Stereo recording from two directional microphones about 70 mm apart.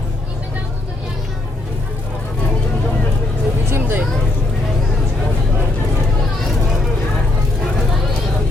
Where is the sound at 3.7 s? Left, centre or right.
Right.